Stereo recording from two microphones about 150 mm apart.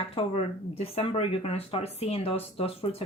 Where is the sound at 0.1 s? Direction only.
40° left (ahead or behind).